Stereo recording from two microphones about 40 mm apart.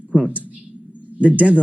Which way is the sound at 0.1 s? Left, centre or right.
Right.